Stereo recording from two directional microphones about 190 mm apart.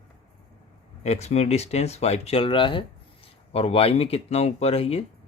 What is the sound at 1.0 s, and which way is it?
Speech, 35° left (ahead or behind).